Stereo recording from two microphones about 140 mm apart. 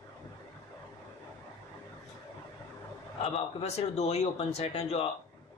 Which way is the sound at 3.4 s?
45° left (ahead or behind).